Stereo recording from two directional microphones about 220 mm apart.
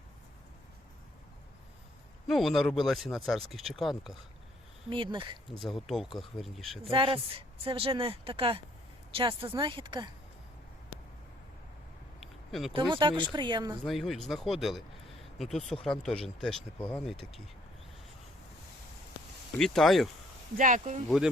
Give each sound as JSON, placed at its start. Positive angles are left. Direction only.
{"t": 2.2, "sound": "speech", "side_deg": 0}
{"t": 4.9, "sound": "a woman's voice", "side_deg": -20}
{"t": 5.5, "sound": "speech", "side_deg": 0}
{"t": 6.9, "sound": "a woman's voice", "side_deg": -25}
{"t": 12.5, "sound": "speech", "side_deg": 0}
{"t": 12.9, "sound": "a woman's voice", "side_deg": -20}
{"t": 13.8, "sound": "speech", "side_deg": 0}
{"t": 19.5, "sound": "speech", "side_deg": 0}
{"t": 20.6, "sound": "speech", "side_deg": -35}